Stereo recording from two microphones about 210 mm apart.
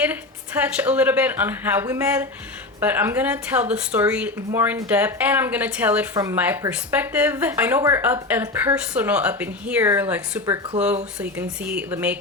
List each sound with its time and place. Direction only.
0.0 s speech: 5° right (ahead or behind)
11.2 s speech: 5° right (ahead or behind)